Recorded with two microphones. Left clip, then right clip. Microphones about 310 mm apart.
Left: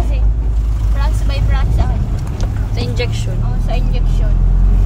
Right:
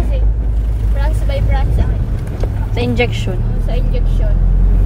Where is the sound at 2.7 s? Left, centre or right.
Centre.